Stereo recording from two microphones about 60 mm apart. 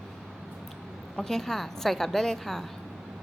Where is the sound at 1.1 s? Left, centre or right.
Centre.